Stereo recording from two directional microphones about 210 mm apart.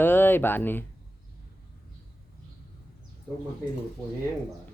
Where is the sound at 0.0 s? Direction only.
10° left (ahead or behind).